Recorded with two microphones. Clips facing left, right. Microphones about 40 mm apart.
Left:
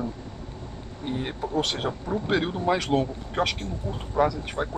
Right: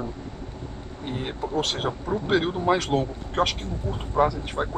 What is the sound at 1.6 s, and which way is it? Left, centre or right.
Speech, centre.